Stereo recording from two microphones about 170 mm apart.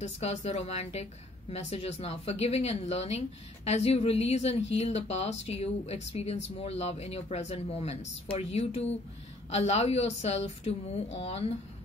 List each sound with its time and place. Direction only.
0.0 s a woman's voice: 40° left (ahead or behind)